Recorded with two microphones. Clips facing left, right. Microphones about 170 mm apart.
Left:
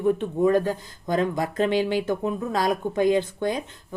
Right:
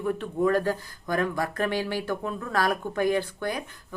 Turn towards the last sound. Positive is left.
turn(degrees=20)  # may be behind; listen again after turning